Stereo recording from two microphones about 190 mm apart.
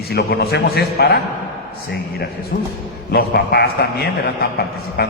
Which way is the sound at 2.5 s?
50° left (ahead or behind).